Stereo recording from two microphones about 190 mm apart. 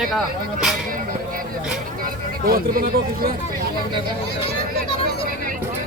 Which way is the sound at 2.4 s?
50° right (ahead or behind).